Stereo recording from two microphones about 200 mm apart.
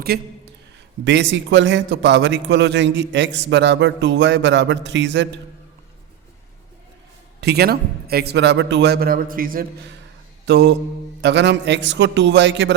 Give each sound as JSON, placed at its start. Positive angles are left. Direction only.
{"t": 0.1, "sound": "a man's voice", "side_deg": -50}
{"t": 7.4, "sound": "a man's voice", "side_deg": -55}
{"t": 10.4, "sound": "a man's voice", "side_deg": -60}